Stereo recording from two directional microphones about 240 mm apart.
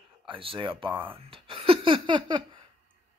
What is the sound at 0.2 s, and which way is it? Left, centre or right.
Speech, right.